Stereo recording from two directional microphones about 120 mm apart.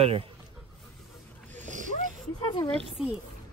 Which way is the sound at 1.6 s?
90° right.